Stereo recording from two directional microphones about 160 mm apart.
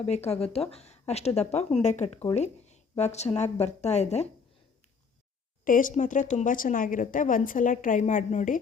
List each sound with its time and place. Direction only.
0.1 s a woman's voice: 40° left (ahead or behind)
5.6 s speech: 55° left (ahead or behind)